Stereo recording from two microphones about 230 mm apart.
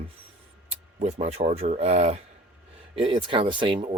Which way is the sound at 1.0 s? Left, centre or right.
Right.